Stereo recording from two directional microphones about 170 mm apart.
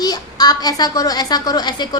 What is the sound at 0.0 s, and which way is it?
A child's voice, 25° left (ahead or behind).